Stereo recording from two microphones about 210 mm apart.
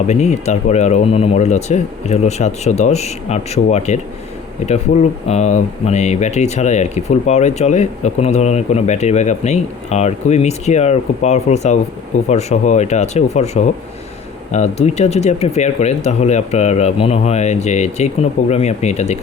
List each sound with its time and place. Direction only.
0.1 s speech: 30° left (ahead or behind)